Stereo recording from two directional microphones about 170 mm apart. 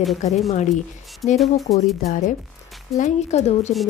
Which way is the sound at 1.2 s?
20° left (ahead or behind).